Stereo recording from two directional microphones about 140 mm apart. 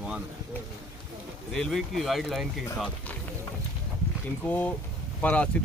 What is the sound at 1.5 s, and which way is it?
Speech, centre (ahead or behind).